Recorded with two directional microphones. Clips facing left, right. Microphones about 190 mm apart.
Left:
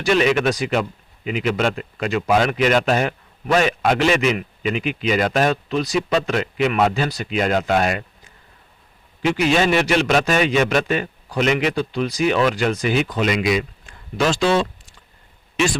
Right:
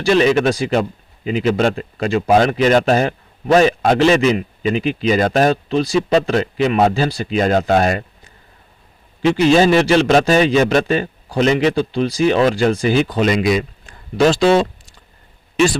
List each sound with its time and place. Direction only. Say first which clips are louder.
0.0 s speech: right 4 dB; 35° right (ahead or behind)
9.2 s speech: right 6 dB; 30° right (ahead or behind)